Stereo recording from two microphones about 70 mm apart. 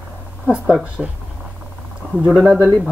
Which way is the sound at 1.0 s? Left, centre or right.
Centre.